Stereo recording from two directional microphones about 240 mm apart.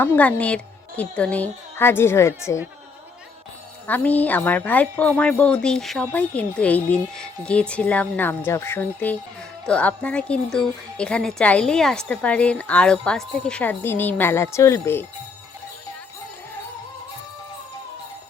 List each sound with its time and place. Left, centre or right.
0.0 s speech: centre
3.8 s speech: centre